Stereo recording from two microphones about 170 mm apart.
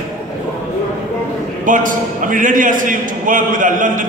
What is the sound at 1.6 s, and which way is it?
A man's voice, 50° right (ahead or behind).